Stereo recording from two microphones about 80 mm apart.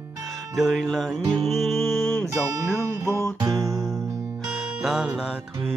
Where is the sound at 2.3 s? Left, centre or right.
Right.